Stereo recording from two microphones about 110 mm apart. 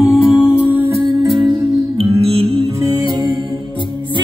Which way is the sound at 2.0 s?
60° right (ahead or behind).